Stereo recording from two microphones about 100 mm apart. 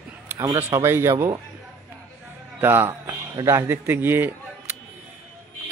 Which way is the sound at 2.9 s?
35° right (ahead or behind).